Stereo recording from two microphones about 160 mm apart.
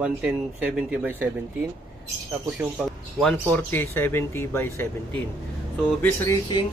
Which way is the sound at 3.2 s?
10° left (ahead or behind).